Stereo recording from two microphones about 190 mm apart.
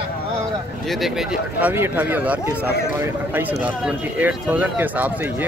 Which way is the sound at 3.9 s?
10° right (ahead or behind).